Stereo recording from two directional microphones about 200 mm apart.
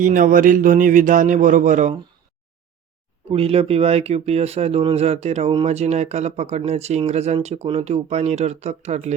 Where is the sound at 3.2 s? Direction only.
30° right (ahead or behind).